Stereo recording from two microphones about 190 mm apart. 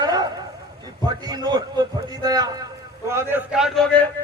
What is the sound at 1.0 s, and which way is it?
A man's voice, 20° right (ahead or behind).